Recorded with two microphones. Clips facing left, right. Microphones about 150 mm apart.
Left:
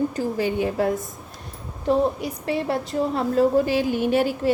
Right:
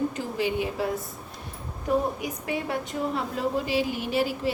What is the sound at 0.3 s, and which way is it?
Speech, 45° left (ahead or behind).